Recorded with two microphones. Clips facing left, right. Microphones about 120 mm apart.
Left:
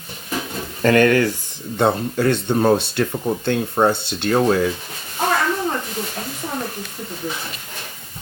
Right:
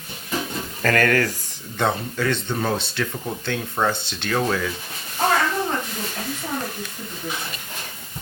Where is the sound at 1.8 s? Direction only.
40° left (ahead or behind).